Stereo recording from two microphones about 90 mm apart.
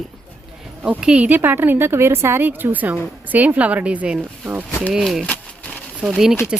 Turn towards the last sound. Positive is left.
turn(degrees=-5)  # may be behind; listen again after turning